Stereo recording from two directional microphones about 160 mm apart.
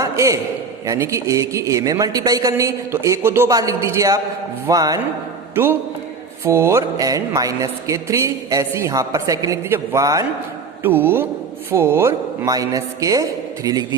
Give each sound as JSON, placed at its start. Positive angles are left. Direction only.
{"t": 0.0, "sound": "a sound", "side_deg": -20}
{"t": 0.9, "sound": "mantra", "side_deg": -15}
{"t": 6.4, "sound": "mantra", "side_deg": -15}
{"t": 10.8, "sound": "a man's voice", "side_deg": -10}
{"t": 11.7, "sound": "mantra", "side_deg": -15}